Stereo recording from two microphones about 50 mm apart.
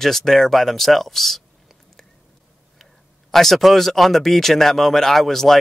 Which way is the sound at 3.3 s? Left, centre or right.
Centre.